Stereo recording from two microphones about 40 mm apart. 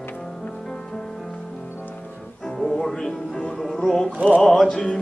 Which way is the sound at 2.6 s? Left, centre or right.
Centre.